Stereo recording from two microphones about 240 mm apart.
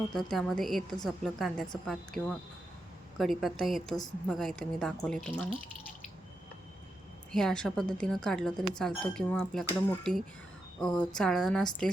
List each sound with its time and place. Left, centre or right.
0.1 s speech: centre
7.3 s speech: centre